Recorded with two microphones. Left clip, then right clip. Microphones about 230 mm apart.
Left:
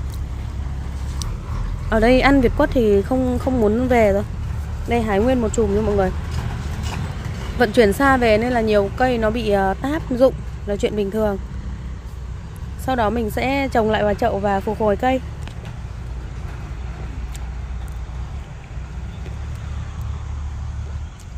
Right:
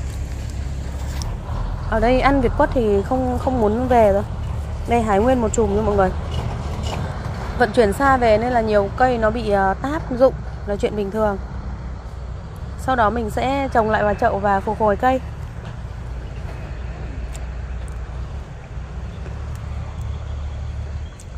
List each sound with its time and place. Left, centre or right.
1.9 s a woman's voice: left
4.8 s a woman's voice: centre
7.5 s a woman's voice: left
12.8 s a woman's voice: centre